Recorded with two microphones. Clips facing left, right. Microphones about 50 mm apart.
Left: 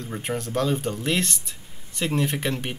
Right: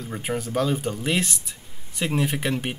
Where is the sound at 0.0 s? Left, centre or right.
Centre.